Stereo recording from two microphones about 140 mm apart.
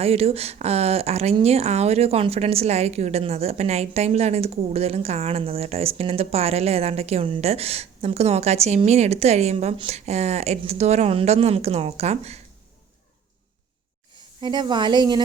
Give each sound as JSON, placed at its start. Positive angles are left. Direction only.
{"t": 0.0, "sound": "speech", "side_deg": -45}
{"t": 14.4, "sound": "speech", "side_deg": -30}